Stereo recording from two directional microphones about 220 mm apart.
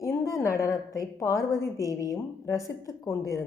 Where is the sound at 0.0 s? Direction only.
15° left (ahead or behind).